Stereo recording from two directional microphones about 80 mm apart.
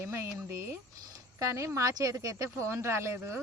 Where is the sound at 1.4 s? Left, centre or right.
Right.